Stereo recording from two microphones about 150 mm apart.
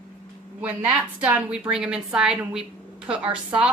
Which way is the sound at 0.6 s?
10° right (ahead or behind).